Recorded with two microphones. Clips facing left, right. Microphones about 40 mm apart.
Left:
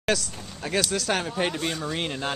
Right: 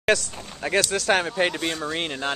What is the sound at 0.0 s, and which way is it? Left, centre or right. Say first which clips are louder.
Speech: right 4 dB; centre.